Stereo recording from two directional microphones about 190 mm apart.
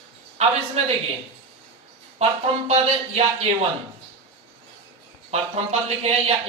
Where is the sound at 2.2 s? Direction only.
35° right (ahead or behind).